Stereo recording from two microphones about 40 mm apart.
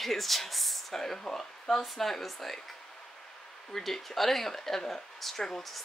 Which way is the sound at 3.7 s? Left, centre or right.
Centre.